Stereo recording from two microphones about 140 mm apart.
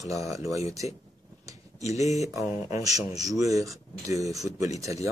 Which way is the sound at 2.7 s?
25° right (ahead or behind).